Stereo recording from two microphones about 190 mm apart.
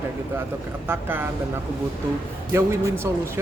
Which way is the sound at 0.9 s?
10° right (ahead or behind).